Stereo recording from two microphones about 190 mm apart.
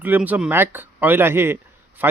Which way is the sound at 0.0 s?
10° right (ahead or behind).